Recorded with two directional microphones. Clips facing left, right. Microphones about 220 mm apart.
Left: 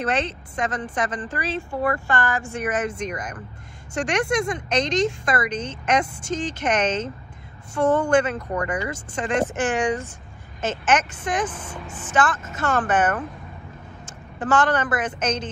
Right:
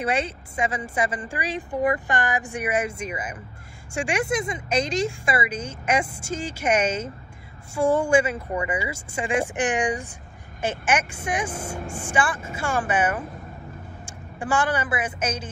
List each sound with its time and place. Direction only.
0.0 s a woman's voice: 10° right (ahead or behind)